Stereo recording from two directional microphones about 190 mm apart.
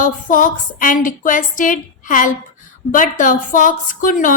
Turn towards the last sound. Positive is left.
turn(degrees=45)  # may be behind; listen again after turning